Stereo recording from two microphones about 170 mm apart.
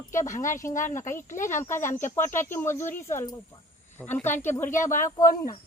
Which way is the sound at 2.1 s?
15° left (ahead or behind).